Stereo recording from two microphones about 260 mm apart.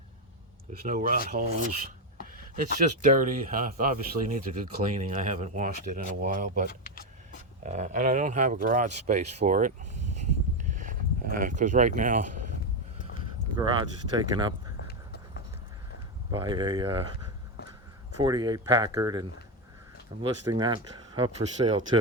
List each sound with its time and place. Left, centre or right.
0.9 s speech: right
10.2 s a sound: right
13.6 s speech: centre
14.8 s horse: left
16.3 s speech: centre
18.2 s speech: centre
20.2 s speech: centre